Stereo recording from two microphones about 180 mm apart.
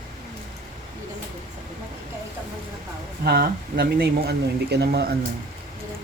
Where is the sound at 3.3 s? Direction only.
60° right (ahead or behind).